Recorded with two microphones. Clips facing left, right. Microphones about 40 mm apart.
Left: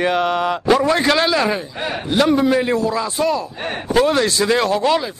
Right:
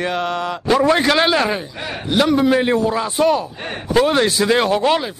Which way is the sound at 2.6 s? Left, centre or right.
Right.